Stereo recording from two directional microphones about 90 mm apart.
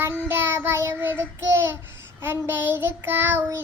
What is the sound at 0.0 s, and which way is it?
Child singing, 25° right (ahead or behind).